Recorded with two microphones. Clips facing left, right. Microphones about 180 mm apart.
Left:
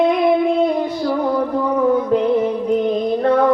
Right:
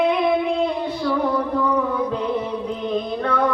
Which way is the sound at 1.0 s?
30° left (ahead or behind).